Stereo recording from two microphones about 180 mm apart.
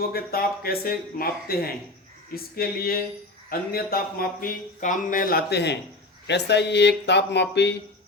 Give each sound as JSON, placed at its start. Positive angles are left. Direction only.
{"t": 0.1, "sound": "a man's voice", "side_deg": 55}